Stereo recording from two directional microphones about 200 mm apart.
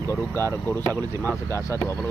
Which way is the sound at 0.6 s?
10° left (ahead or behind).